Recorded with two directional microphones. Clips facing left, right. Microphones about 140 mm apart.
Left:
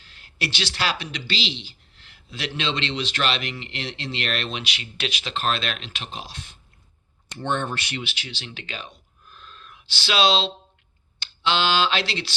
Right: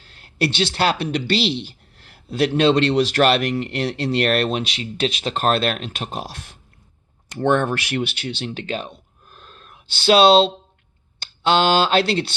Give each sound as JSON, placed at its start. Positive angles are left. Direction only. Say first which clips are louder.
{"t": 0.0, "sound": "a man's voice", "louder": "right 9 dB", "side_deg": -35}
{"t": 8.2, "sound": "speech", "louder": "right 10 dB", "side_deg": -40}
{"t": 8.9, "sound": "a sound", "louder": "right 5 dB", "side_deg": -45}
{"t": 11.4, "sound": "a man's voice", "louder": "right 5 dB", "side_deg": -45}